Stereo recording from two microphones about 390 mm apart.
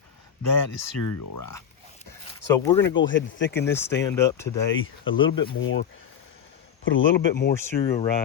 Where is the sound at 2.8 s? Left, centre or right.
Left.